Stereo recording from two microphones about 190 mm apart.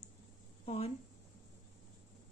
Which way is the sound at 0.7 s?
30° left (ahead or behind).